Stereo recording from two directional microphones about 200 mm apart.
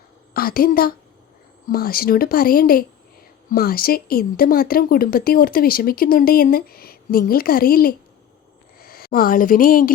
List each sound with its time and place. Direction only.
0.3 s a woman's voice: 50° left (ahead or behind)